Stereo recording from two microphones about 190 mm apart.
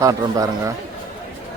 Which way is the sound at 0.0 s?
15° right (ahead or behind).